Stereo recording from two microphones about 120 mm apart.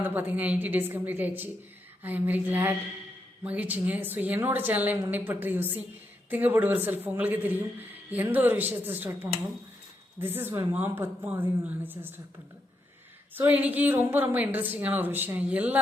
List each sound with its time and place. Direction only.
0.0 s a man's voice: 15° right (ahead or behind)
13.3 s a man's voice: 15° right (ahead or behind)